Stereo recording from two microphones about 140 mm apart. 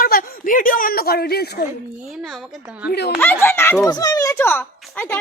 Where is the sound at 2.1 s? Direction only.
Centre (ahead or behind).